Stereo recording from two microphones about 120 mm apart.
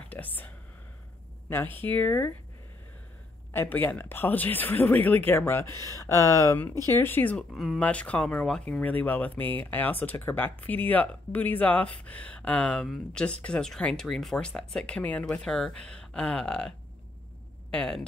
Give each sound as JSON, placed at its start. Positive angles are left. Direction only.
{"t": 0.1, "sound": "whispering", "side_deg": 15}
{"t": 1.5, "sound": "speech", "side_deg": 20}
{"t": 3.5, "sound": "speech", "side_deg": 15}
{"t": 7.5, "sound": "speech", "side_deg": 0}
{"t": 7.8, "sound": "speech", "side_deg": 10}